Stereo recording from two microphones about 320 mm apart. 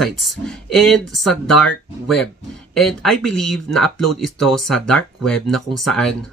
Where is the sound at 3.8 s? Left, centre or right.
Left.